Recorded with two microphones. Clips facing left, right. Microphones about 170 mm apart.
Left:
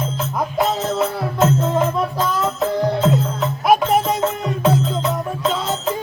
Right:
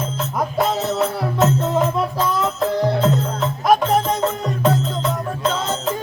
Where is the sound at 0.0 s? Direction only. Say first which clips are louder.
Even; centre (ahead or behind).